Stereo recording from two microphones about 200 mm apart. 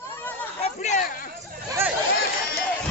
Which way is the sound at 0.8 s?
35° left (ahead or behind).